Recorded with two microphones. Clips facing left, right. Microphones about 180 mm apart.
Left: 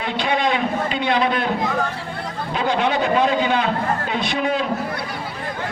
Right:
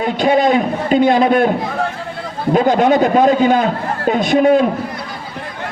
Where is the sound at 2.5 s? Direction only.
45° right (ahead or behind).